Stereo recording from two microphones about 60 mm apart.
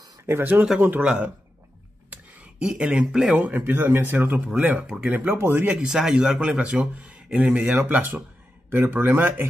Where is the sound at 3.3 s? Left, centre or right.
Right.